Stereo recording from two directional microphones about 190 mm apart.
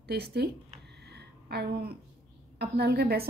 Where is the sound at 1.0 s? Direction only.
60° right (ahead or behind).